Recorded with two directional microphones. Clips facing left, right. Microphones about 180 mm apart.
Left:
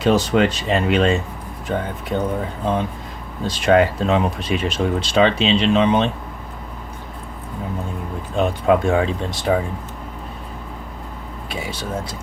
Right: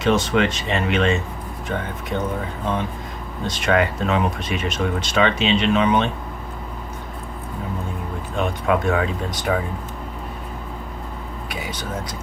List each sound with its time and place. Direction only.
0.0 s speech: 35° left (ahead or behind)
3.4 s speech: 30° left (ahead or behind)
8.4 s speech: 30° left (ahead or behind)
11.4 s speech: 25° left (ahead or behind)